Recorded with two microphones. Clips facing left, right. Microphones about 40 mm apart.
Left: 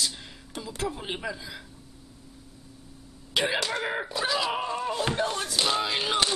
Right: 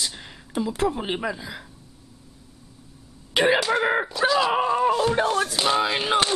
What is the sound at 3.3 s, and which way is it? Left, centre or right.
Speech, right.